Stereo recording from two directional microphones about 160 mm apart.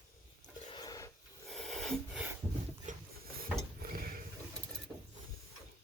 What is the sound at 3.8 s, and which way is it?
Mechanisms, 65° right (ahead or behind).